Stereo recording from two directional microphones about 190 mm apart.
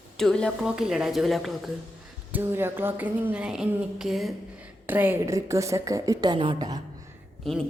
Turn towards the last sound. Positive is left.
turn(degrees=0)  # may be behind; listen again after turning